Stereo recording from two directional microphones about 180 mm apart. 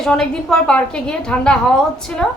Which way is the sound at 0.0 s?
5° left (ahead or behind).